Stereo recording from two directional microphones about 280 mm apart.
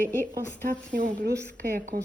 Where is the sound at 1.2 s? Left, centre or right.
Right.